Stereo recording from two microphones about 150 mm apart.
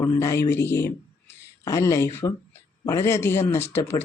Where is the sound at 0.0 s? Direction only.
20° left (ahead or behind).